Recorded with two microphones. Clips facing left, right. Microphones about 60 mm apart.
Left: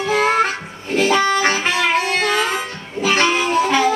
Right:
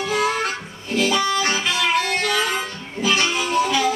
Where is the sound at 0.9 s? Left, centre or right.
Left.